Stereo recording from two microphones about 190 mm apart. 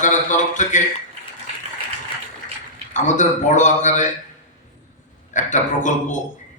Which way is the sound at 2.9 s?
40° left (ahead or behind).